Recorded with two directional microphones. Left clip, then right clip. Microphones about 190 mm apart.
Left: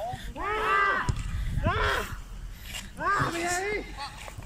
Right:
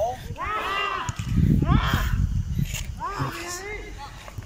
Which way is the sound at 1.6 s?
50° left (ahead or behind).